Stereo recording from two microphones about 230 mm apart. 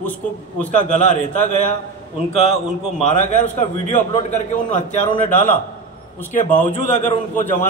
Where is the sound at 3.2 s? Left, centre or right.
Left.